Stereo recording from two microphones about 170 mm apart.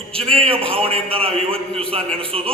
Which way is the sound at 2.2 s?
35° right (ahead or behind).